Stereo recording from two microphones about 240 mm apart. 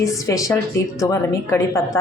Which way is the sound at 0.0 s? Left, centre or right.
Centre.